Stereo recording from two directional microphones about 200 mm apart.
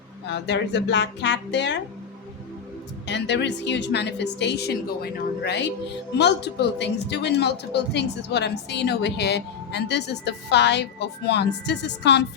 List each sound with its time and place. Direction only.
0.3 s speech: 60° left (ahead or behind)
3.1 s speech: 60° left (ahead or behind)